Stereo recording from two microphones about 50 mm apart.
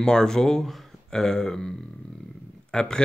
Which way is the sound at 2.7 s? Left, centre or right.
Centre.